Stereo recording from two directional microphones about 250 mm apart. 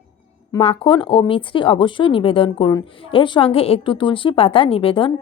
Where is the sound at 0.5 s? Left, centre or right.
Left.